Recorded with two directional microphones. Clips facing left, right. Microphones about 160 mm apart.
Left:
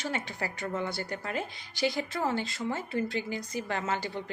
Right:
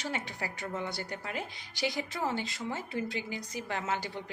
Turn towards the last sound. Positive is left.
turn(degrees=-10)  # may be behind; listen again after turning